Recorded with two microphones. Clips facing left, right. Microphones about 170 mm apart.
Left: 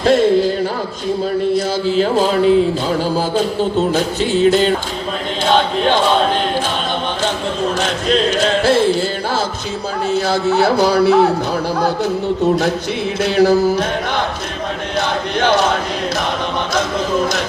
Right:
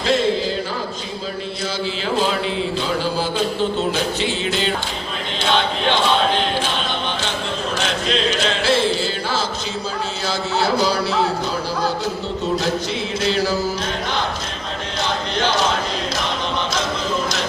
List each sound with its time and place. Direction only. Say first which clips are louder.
0.0 s music: left 7 dB; 50° left (ahead or behind)
1.5 s mantra: left 10 dB; 45° left (ahead or behind)
3.0 s music: left 4 dB; 45° left (ahead or behind)
7.8 s music: left 4 dB; 45° left (ahead or behind)
10.2 s speech: left 5 dB; 55° left (ahead or behind)
13.2 s mantra: left 8 dB; 55° left (ahead or behind)
14.9 s chant: left 4 dB; 55° left (ahead or behind)